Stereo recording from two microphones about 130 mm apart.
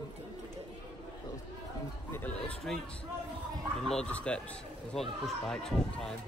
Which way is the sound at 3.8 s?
5° left (ahead or behind).